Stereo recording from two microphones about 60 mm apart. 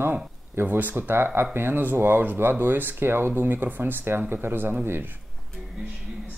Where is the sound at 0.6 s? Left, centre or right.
Right.